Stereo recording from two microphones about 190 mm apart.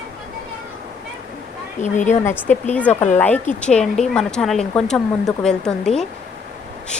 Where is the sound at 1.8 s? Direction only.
40° left (ahead or behind).